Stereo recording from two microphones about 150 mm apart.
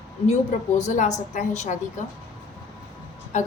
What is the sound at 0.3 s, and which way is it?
A woman's voice, 55° left (ahead or behind).